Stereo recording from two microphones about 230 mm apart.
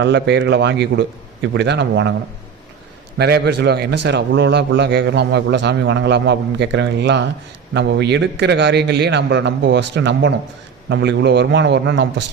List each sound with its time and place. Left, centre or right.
0.0 s a man's voice: right
3.2 s a man's voice: right